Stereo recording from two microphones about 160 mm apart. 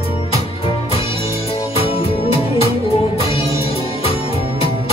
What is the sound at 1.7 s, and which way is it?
Music, 35° left (ahead or behind).